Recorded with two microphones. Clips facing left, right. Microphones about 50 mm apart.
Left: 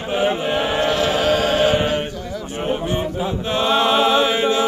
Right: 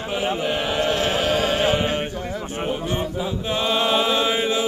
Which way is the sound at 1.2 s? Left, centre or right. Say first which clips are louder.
Left 4 dB; left.